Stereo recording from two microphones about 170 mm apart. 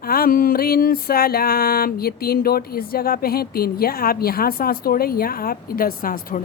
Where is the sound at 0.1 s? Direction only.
60° left (ahead or behind).